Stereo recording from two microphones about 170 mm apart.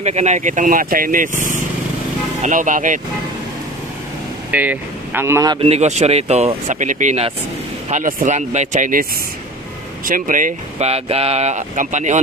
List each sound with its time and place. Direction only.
0.0 s speech: 40° right (ahead or behind)
4.5 s speech: 10° right (ahead or behind)
5.6 s speech: 40° right (ahead or behind)
10.0 s speech: 55° right (ahead or behind)